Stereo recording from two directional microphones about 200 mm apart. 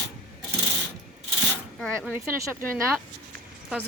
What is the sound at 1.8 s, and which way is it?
Speech, 5° left (ahead or behind).